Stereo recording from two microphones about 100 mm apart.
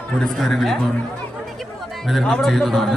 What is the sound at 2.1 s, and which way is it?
Speech, 5° left (ahead or behind).